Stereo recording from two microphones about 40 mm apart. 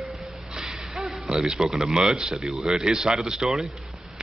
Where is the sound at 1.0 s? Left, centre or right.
Centre.